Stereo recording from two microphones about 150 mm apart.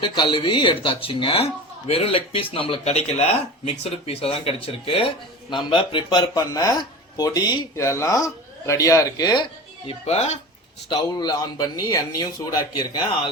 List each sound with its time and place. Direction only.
0.0 s speech: 35° left (ahead or behind)
10.1 s speech: 45° left (ahead or behind)
10.8 s speech: 30° left (ahead or behind)